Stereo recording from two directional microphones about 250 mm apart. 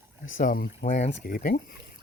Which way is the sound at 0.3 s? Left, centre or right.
Left.